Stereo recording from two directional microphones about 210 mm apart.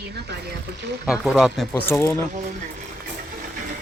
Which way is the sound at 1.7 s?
10° left (ahead or behind).